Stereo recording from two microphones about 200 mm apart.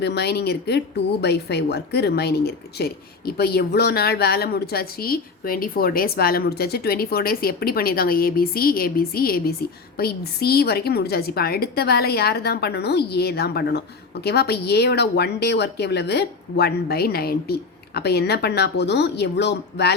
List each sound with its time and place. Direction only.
0.0 s speech: 55° left (ahead or behind)